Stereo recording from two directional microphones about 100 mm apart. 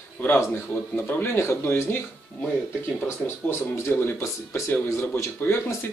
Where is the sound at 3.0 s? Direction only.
25° left (ahead or behind).